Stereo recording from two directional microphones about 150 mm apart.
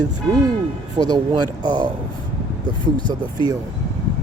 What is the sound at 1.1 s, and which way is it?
Speech, 30° right (ahead or behind).